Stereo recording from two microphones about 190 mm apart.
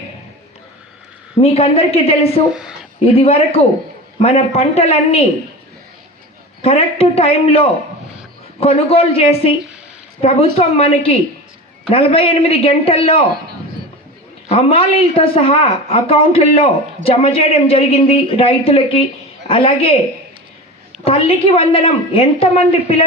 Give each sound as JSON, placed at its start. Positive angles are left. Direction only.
{"t": 1.4, "sound": "speech", "side_deg": 30}
{"t": 2.5, "sound": "a woman's voice", "side_deg": -5}
{"t": 3.0, "sound": "speech", "side_deg": 30}
{"t": 6.6, "sound": "speech", "side_deg": 30}
{"t": 14.5, "sound": "a man's voice", "side_deg": 30}
{"t": 21.0, "sound": "speech", "side_deg": 30}